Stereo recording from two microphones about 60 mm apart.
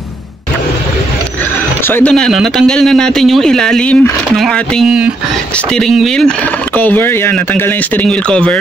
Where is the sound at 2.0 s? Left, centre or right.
Centre.